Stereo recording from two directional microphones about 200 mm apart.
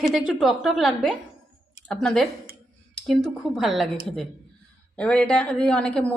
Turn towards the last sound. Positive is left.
turn(degrees=5)  # may be behind; listen again after turning